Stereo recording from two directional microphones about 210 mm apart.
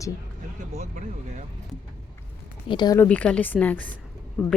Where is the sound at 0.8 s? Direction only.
35° right (ahead or behind).